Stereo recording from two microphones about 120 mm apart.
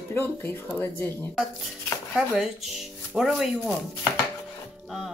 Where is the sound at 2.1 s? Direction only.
Centre (ahead or behind).